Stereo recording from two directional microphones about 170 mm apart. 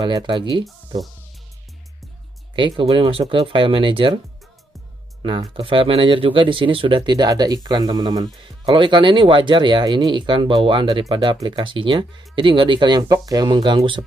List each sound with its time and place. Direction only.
0.0 s speech: 25° right (ahead or behind)
2.5 s speech: 30° right (ahead or behind)
5.2 s speech: 30° right (ahead or behind)